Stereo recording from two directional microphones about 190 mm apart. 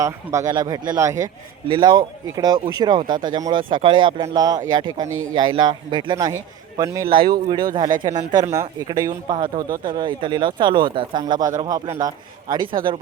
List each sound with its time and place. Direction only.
0.0 s speech: 15° right (ahead or behind)